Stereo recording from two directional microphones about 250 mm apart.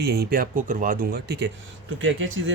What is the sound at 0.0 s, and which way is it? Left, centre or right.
Speech, right.